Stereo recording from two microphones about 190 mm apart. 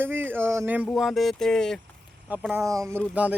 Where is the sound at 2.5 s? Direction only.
15° right (ahead or behind).